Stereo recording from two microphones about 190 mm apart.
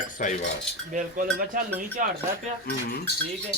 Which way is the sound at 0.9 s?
45° right (ahead or behind).